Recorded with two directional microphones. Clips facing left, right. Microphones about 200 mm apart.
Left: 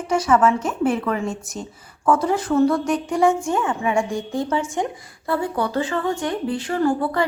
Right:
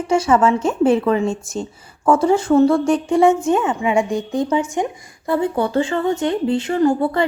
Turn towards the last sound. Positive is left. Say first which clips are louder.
# right 4 dB
turn(degrees=-25)  # may be behind; listen again after turning